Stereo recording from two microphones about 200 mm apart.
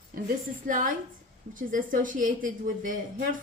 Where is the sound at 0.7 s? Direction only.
40° right (ahead or behind).